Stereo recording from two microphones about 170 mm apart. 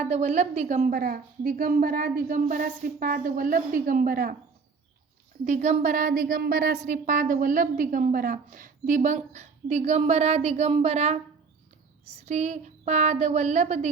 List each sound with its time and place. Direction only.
0.0 s a woman's voice: 40° right (ahead or behind)
5.5 s a woman's voice: 45° right (ahead or behind)